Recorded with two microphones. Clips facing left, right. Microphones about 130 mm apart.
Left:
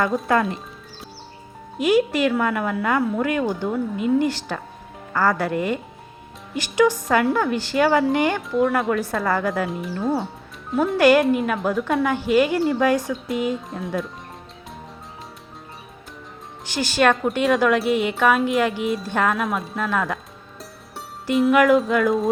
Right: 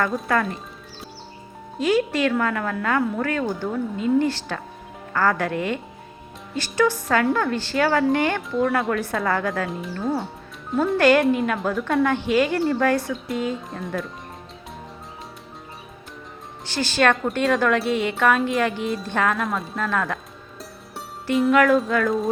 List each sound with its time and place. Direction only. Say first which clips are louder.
0.0 s speech: left 2 dB; 25° left (ahead or behind)
1.8 s a woman's voice: left 2 dB; 10° left (ahead or behind)
10.9 s a woman's voice: left 2 dB; 10° left (ahead or behind)
13.5 s speech: left 2 dB; centre (ahead or behind)
16.6 s speech: left 1 dB; 15° left (ahead or behind)
21.2 s speech: left 1 dB; 5° left (ahead or behind)